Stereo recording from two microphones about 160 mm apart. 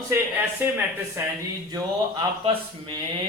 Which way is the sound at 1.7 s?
25° right (ahead or behind).